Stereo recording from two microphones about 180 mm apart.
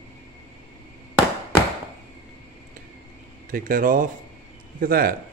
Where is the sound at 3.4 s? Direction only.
50° right (ahead or behind).